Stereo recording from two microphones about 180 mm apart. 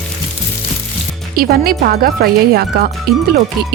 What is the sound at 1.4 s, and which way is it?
Speech, 55° right (ahead or behind).